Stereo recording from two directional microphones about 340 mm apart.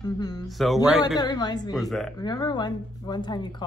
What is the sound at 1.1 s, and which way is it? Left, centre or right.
Speech, centre.